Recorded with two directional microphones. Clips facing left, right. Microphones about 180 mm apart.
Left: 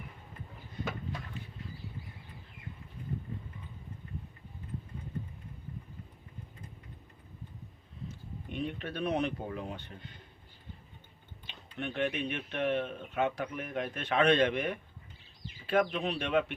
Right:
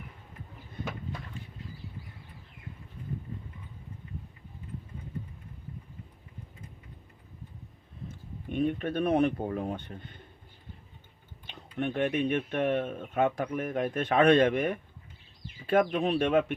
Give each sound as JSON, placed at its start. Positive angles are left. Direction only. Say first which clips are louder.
{"t": 8.0, "sound": "speech", "louder": "right 2 dB", "side_deg": -50}
{"t": 11.4, "sound": "speech", "louder": "right 7 dB", "side_deg": -50}